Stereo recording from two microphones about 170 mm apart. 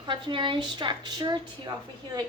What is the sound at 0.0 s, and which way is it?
A woman's voice, 30° right (ahead or behind).